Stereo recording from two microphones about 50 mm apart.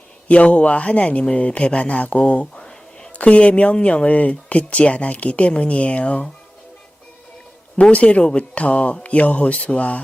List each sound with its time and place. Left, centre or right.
0.3 s speech: left
7.8 s speech: left